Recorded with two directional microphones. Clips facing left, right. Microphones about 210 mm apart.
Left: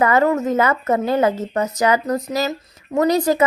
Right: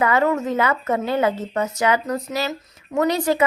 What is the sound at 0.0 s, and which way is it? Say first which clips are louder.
A woman's voice: left 3 dB; 40° left (ahead or behind).